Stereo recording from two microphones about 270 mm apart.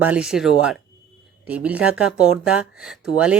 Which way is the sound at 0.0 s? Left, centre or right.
Centre.